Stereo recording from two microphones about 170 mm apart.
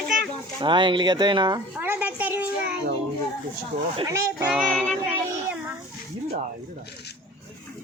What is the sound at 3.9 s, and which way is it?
Speech, 20° right (ahead or behind).